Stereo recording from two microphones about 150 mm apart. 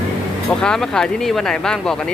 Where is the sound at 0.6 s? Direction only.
5° left (ahead or behind).